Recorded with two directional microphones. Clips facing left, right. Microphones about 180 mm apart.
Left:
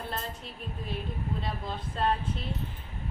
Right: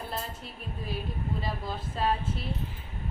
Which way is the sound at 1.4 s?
5° right (ahead or behind).